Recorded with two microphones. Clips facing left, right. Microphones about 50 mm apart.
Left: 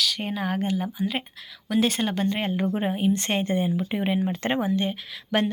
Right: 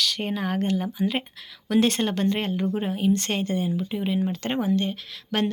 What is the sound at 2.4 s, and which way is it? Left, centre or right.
Speech, centre.